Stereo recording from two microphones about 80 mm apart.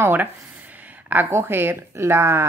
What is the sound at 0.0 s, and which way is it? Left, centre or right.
Speech, right.